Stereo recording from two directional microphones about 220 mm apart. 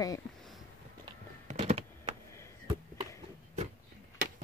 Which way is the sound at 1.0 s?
30° right (ahead or behind).